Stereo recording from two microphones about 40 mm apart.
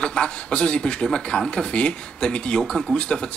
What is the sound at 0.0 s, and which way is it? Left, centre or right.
A man's voice, left.